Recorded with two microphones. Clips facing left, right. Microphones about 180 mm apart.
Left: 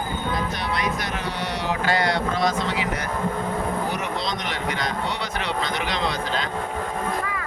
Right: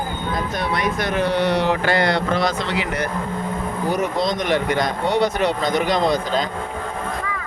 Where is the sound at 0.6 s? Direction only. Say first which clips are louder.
Right 4 dB; 50° right (ahead or behind); by 3.0 s 70° right (ahead or behind).